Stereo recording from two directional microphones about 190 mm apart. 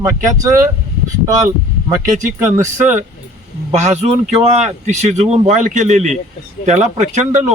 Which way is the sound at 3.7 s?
35° right (ahead or behind).